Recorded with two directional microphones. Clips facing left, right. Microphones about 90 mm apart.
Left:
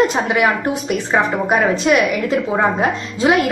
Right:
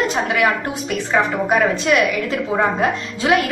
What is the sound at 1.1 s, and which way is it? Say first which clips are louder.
Speech: left 1 dB; 20° left (ahead or behind).